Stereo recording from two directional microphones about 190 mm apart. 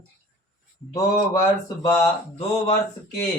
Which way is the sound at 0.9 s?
15° left (ahead or behind).